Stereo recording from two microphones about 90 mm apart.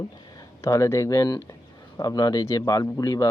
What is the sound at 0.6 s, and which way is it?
A man's voice, 35° left (ahead or behind).